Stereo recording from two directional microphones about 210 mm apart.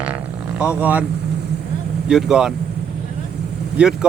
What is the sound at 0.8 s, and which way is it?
Speech, 10° right (ahead or behind).